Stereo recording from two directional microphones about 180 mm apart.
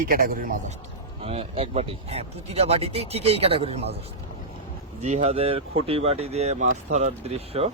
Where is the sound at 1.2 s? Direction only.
35° right (ahead or behind).